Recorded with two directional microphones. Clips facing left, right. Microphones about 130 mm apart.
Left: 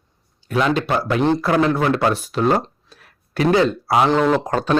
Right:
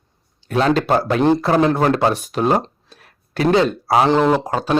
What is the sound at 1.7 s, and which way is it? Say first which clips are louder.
Speech: right 2 dB; 40° right (ahead or behind).